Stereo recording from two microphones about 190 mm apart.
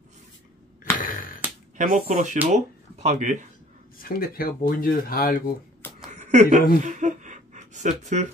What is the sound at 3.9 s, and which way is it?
Speech, 50° left (ahead or behind).